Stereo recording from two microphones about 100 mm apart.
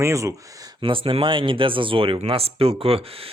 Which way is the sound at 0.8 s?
60° right (ahead or behind).